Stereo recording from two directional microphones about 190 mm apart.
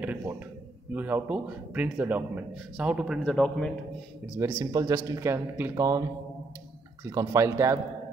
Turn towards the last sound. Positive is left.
turn(degrees=-15)  # may be behind; listen again after turning